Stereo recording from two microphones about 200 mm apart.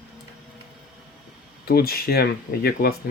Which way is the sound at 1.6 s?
50° left (ahead or behind).